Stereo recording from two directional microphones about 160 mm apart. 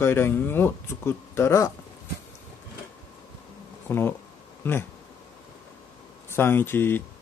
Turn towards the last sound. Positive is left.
turn(degrees=15)  # may be behind; listen again after turning